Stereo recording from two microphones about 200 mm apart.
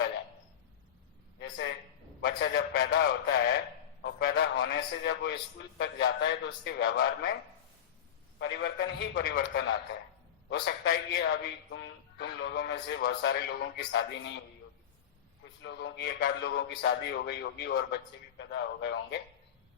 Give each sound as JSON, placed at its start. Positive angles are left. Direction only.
{"t": 1.4, "sound": "a sound", "side_deg": 60}
{"t": 2.2, "sound": "a man's voice", "side_deg": 55}
{"t": 4.0, "sound": "a sound", "side_deg": 55}
{"t": 4.5, "sound": "speech", "side_deg": 55}
{"t": 8.4, "sound": "speech", "side_deg": 60}
{"t": 15.6, "sound": "speech", "side_deg": 60}